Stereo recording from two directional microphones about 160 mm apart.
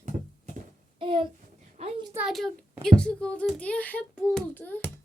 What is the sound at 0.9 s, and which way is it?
Speech, 30° right (ahead or behind).